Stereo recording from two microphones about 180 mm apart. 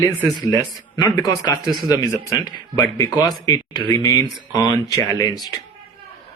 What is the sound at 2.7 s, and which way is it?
Speech, 20° left (ahead or behind).